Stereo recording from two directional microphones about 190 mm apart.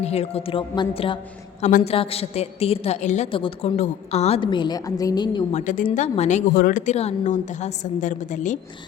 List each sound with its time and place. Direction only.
0.0 s a woman's voice: 35° left (ahead or behind)
5.5 s a woman's voice: 45° left (ahead or behind)
6.5 s a woman's voice: 50° left (ahead or behind)